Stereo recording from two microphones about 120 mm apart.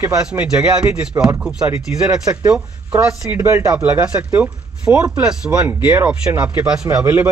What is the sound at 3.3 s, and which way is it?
Speech, 25° right (ahead or behind).